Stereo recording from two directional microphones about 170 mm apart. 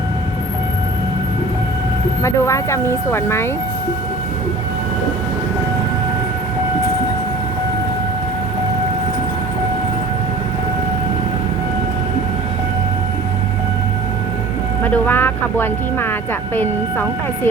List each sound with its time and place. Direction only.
2.2 s speech: 15° left (ahead or behind)
14.8 s speech: 10° left (ahead or behind)